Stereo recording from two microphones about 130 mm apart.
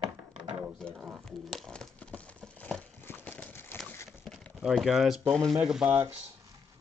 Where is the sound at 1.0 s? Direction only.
Centre (ahead or behind).